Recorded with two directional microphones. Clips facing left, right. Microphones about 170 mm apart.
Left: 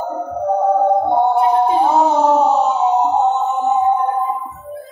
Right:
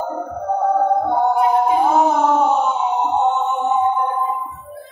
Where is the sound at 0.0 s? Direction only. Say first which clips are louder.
Left 3 dB; 20° left (ahead or behind); by 3.9 s 40° left (ahead or behind).